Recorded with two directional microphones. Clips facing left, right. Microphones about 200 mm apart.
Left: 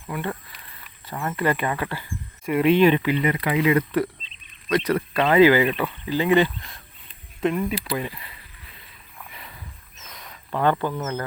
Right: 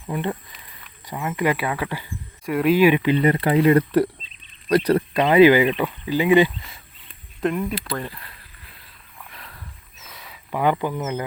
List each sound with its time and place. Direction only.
0.1 s speech: 20° right (ahead or behind)
2.5 s speech: centre (ahead or behind)
3.3 s speech: 35° right (ahead or behind)
5.1 s speech: 15° right (ahead or behind); by 8.3 s 5° left (ahead or behind)
9.1 s a sound: centre (ahead or behind)